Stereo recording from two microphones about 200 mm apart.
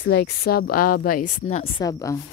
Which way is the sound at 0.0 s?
60° left (ahead or behind).